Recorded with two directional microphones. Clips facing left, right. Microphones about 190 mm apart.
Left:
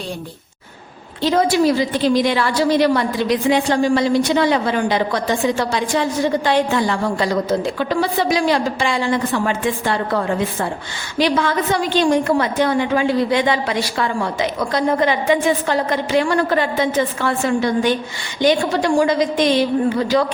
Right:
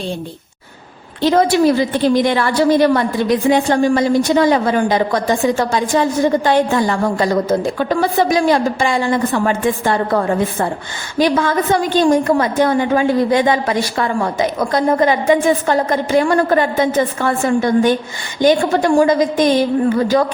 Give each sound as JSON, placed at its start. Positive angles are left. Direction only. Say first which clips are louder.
{"t": 1.2, "sound": "a woman's voice", "louder": "right 3 dB", "side_deg": -55}